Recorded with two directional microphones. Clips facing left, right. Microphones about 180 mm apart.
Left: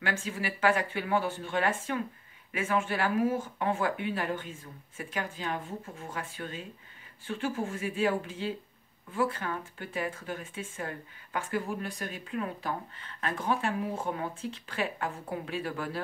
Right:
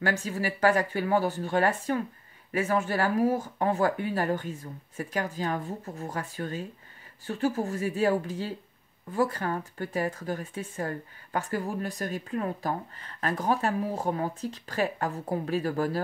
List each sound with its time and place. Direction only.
0.0 s speech: 40° right (ahead or behind)